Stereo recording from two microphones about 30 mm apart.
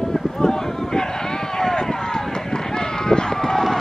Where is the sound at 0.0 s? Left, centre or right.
Centre.